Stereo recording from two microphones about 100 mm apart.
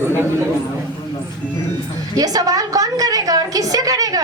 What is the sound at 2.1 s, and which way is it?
A woman's voice, 40° right (ahead or behind).